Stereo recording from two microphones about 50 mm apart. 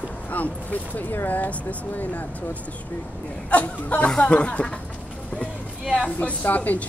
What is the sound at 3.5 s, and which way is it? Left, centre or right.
Speech, left.